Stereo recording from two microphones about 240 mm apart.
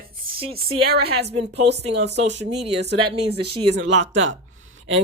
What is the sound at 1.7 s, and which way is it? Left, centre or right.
Speech, right.